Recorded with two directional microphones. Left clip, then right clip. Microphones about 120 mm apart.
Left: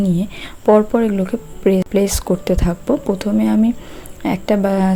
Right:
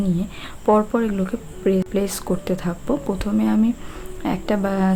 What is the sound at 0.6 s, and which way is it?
Speech, 35° left (ahead or behind).